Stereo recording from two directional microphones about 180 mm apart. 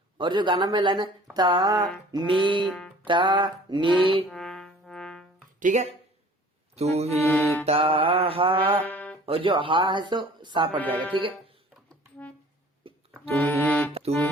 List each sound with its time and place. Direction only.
0.2 s speech: 25° right (ahead or behind)
4.3 s music: centre (ahead or behind)
5.5 s speech: 40° right (ahead or behind)
6.7 s music: 35° right (ahead or behind)
7.3 s music: 10° left (ahead or behind)
7.6 s music: 30° right (ahead or behind)
8.8 s music: 10° left (ahead or behind)
9.2 s speech: 30° right (ahead or behind)
10.8 s music: 10° left (ahead or behind)
13.3 s accordion: 10° left (ahead or behind)